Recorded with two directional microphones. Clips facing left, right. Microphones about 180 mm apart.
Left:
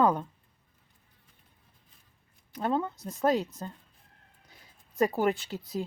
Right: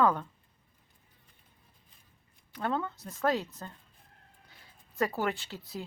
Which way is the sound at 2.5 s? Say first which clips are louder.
Left 3 dB; 20° left (ahead or behind).